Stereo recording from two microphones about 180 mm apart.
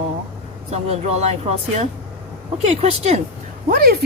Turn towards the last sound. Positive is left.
turn(degrees=-55)  # may be behind; listen again after turning